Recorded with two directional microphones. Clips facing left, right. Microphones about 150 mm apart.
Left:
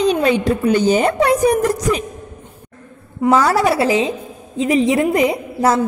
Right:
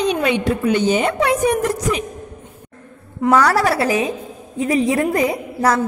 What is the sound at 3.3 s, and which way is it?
A woman's voice, 20° left (ahead or behind).